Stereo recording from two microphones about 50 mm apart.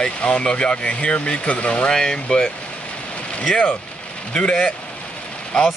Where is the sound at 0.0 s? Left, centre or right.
Left.